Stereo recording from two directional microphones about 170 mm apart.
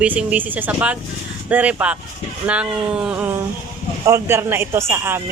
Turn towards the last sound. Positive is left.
turn(degrees=-15)  # may be behind; listen again after turning